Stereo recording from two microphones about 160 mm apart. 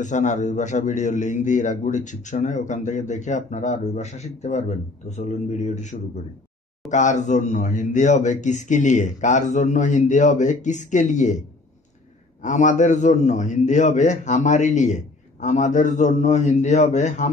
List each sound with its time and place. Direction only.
0.0 s a man's voice: 50° left (ahead or behind)
12.4 s a man's voice: 50° left (ahead or behind)